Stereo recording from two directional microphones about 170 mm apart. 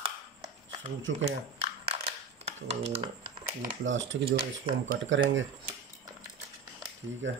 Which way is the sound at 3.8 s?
90° right.